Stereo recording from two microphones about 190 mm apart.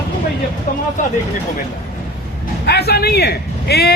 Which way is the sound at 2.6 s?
60° left (ahead or behind).